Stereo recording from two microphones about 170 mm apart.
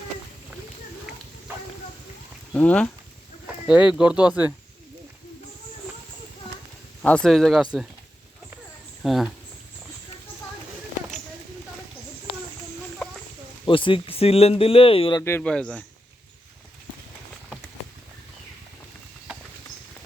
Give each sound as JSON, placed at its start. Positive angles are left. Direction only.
{"t": 2.5, "sound": "speech", "side_deg": 10}
{"t": 3.7, "sound": "speech", "side_deg": -5}
{"t": 7.0, "sound": "speech", "side_deg": 5}
{"t": 9.0, "sound": "speech", "side_deg": 0}
{"t": 13.7, "sound": "speech", "side_deg": 30}
{"t": 15.2, "sound": "speech", "side_deg": 10}